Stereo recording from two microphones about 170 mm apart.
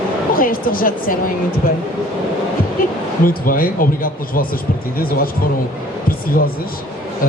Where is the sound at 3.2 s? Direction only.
55° left (ahead or behind).